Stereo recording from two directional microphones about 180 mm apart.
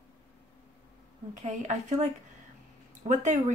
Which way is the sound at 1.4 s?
40° right (ahead or behind).